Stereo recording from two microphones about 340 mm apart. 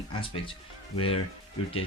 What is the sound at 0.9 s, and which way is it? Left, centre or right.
Speech, centre.